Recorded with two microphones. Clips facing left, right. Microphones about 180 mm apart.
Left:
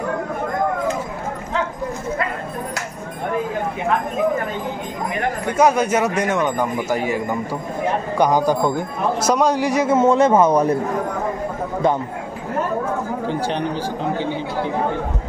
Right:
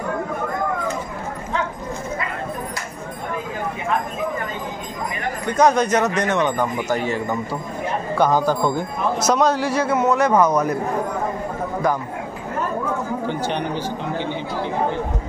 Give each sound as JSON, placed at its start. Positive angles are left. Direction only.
{"t": 5.5, "sound": "a man's voice", "side_deg": 5}
{"t": 13.3, "sound": "speech", "side_deg": 35}